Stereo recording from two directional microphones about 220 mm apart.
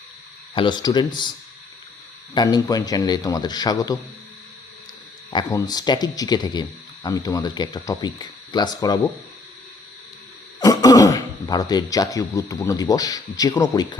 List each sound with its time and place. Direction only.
0.5 s speech: 20° left (ahead or behind)
2.3 s a man's voice: 20° left (ahead or behind)
5.3 s speech: 15° left (ahead or behind)
10.6 s speech: 15° left (ahead or behind)